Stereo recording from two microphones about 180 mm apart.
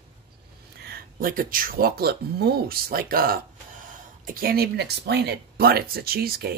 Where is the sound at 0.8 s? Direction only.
55° right (ahead or behind).